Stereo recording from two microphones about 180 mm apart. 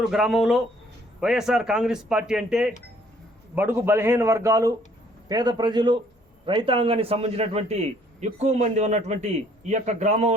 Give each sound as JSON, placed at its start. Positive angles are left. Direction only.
{"t": 0.0, "sound": "a man's voice", "side_deg": 0}